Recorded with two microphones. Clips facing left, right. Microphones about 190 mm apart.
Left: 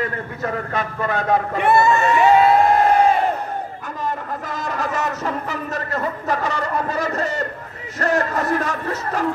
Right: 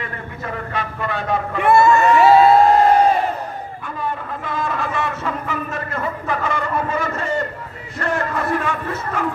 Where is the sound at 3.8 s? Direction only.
40° left (ahead or behind).